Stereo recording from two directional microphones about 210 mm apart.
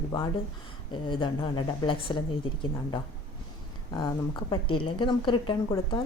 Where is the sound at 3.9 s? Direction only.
20° left (ahead or behind).